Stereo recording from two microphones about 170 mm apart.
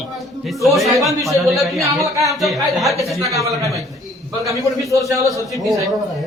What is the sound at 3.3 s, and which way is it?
A man's voice, 20° right (ahead or behind).